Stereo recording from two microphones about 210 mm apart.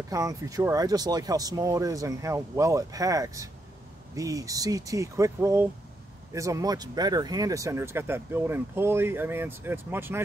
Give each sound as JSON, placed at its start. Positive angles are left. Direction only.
{"t": 0.1, "sound": "speech", "side_deg": -15}